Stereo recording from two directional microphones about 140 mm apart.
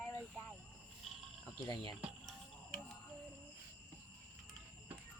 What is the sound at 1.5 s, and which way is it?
Speech, 30° left (ahead or behind).